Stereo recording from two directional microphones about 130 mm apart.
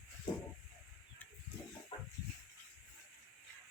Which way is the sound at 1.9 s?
40° left (ahead or behind).